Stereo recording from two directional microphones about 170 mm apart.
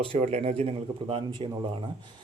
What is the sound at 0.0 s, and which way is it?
Speech, 35° right (ahead or behind).